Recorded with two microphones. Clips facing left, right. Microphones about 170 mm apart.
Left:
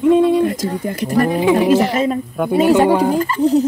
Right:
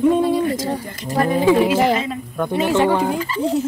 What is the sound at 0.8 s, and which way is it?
Speech, 55° left (ahead or behind).